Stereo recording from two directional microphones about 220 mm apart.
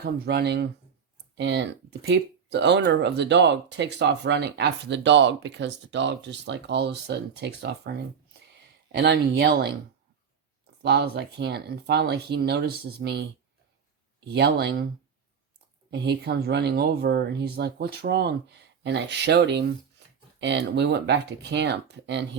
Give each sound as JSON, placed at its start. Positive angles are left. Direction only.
{"t": 0.0, "sound": "speech", "side_deg": -45}
{"t": 10.8, "sound": "speech", "side_deg": -50}
{"t": 14.3, "sound": "speech", "side_deg": -50}
{"t": 15.9, "sound": "speech", "side_deg": -50}